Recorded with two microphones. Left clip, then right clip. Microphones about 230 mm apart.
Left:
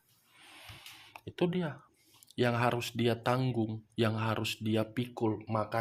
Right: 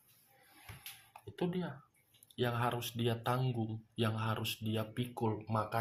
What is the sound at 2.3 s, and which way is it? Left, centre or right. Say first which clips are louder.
Speech: left 6 dB; left.